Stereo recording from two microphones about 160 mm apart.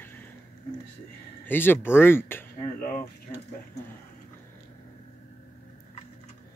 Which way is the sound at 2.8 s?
65° left (ahead or behind).